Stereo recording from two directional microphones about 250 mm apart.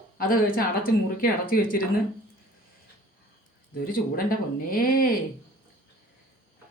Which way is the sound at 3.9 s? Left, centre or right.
Left.